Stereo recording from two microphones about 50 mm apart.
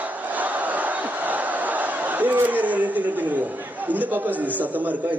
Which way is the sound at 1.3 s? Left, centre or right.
Right.